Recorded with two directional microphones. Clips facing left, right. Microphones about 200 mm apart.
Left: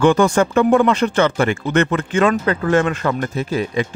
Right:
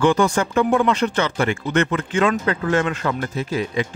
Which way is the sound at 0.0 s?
55° left (ahead or behind).